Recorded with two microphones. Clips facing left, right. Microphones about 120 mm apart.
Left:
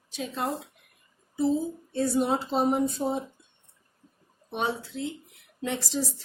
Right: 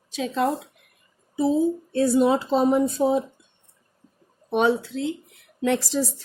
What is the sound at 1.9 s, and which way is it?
Speech, 85° right.